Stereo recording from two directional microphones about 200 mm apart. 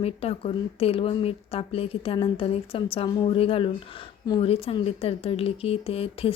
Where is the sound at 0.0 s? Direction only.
30° left (ahead or behind).